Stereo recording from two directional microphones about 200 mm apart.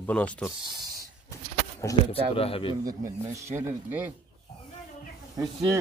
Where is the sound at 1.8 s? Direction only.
15° left (ahead or behind).